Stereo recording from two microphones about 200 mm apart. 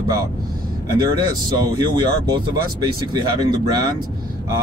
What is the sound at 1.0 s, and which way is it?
Speech, 20° right (ahead or behind).